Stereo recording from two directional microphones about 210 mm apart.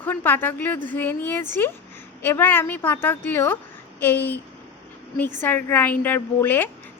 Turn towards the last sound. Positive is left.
turn(degrees=10)  # may be behind; listen again after turning